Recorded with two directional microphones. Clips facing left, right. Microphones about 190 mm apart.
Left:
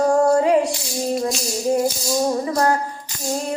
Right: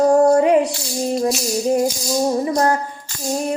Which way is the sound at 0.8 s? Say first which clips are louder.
Right 2 dB; 15° right (ahead or behind).